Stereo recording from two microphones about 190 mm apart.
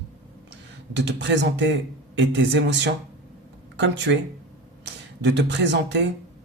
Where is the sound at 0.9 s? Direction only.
70° right (ahead or behind).